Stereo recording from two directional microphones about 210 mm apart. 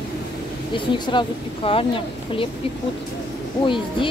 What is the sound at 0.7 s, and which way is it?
Speech, 25° left (ahead or behind).